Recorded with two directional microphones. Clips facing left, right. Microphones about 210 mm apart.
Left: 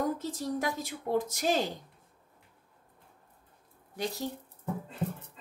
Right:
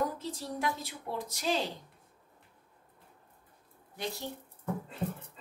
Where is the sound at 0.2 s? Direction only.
45° left (ahead or behind).